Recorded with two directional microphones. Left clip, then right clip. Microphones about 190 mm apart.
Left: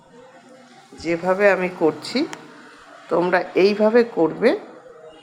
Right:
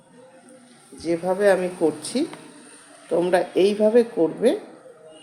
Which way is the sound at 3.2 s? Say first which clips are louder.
Left 2 dB; 5° right (ahead or behind).